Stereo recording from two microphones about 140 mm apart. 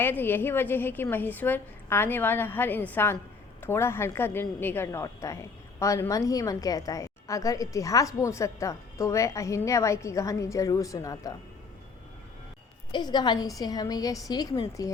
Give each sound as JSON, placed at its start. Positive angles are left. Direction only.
{"t": 0.0, "sound": "a woman's voice", "side_deg": 15}
{"t": 12.9, "sound": "a woman's voice", "side_deg": 30}